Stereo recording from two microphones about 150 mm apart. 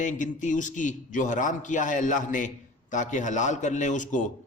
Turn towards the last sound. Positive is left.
turn(degrees=55)  # may be behind; listen again after turning